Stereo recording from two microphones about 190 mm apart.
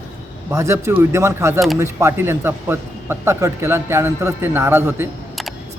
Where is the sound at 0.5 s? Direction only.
15° right (ahead or behind).